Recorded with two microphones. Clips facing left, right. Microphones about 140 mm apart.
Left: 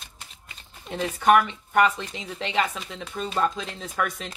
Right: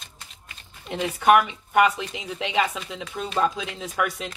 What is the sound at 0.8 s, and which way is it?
Speech, 5° right (ahead or behind).